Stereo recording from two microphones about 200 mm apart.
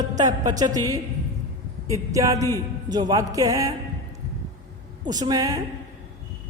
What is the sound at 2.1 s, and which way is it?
Music, 15° right (ahead or behind).